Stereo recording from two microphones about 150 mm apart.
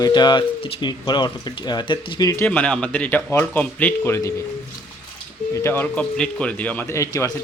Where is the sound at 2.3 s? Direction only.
15° left (ahead or behind).